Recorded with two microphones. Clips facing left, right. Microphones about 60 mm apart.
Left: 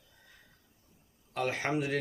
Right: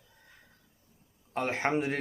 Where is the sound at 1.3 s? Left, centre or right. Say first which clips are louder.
Right 2 dB; right.